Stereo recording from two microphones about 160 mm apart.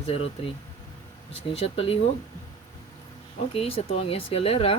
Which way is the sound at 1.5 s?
35° left (ahead or behind).